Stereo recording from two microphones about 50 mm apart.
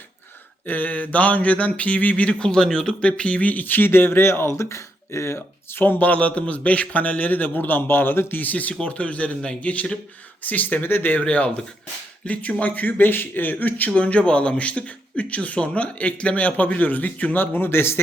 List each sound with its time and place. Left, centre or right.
0.6 s speech: left
2.5 s speech: centre; by 4.2 s left
4.2 s speech: left
5.7 s a man's voice: left
10.8 s speech: left
11.2 s speech: left
17.4 s speech: left